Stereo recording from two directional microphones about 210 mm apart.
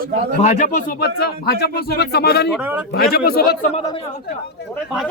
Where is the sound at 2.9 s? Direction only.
45° left (ahead or behind).